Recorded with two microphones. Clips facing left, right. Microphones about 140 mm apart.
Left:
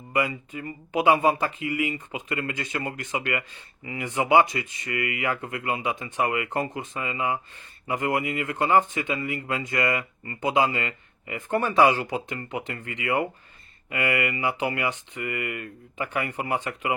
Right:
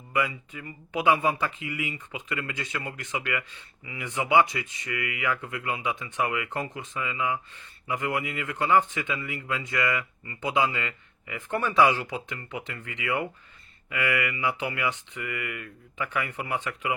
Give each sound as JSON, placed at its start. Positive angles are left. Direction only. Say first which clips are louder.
{"t": 0.2, "sound": "speech", "louder": "left 2 dB", "side_deg": 40}